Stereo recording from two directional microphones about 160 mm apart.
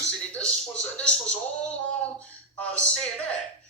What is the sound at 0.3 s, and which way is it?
Music, 5° left (ahead or behind).